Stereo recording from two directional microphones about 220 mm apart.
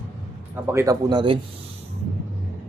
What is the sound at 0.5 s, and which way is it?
Speech, 10° right (ahead or behind).